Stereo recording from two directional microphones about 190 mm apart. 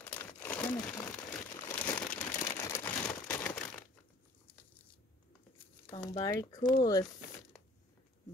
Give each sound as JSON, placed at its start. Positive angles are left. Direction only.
{"t": 0.0, "sound": "crumpling", "side_deg": 10}
{"t": 5.9, "sound": "speech", "side_deg": 20}